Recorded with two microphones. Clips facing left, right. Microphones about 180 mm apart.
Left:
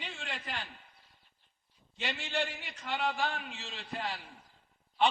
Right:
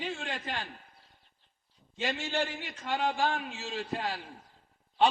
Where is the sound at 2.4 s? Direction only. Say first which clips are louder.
Right 4 dB; 45° right (ahead or behind).